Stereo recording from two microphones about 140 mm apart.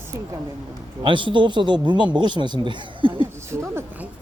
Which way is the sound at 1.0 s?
35° right (ahead or behind).